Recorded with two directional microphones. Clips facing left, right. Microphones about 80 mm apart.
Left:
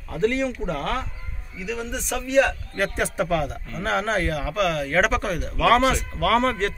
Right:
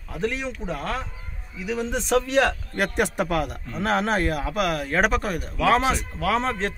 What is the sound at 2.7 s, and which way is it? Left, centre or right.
Speech, right.